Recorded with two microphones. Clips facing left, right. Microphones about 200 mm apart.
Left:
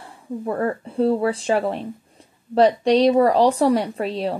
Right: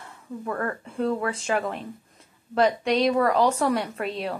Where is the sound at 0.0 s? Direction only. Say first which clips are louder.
Left 6 dB; 30° left (ahead or behind).